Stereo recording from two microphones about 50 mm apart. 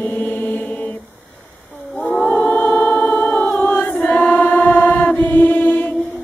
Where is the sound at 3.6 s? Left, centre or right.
Left.